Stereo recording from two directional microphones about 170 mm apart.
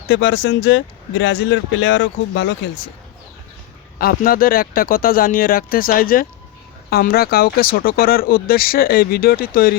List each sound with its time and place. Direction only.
0.1 s speech: 90° left
3.9 s speech: 60° left (ahead or behind)